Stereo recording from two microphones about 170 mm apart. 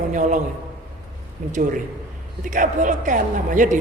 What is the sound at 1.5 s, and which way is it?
A man's voice, 50° right (ahead or behind).